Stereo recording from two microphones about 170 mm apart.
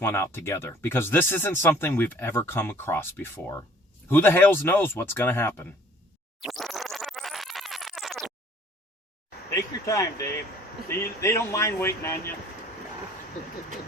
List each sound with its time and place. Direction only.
0.0 s speech: 15° left (ahead or behind)
6.4 s music: centre (ahead or behind)
9.5 s vehicle: 20° left (ahead or behind)
10.8 s speech: 15° left (ahead or behind)